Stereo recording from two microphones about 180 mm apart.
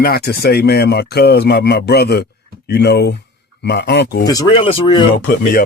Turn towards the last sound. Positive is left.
turn(degrees=55)  # may be behind; listen again after turning